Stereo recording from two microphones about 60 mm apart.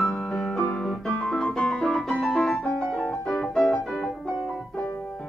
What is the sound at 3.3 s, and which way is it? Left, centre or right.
Piano, centre.